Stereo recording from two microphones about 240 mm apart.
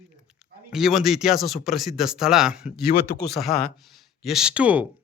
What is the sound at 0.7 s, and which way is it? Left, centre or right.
Speech, centre.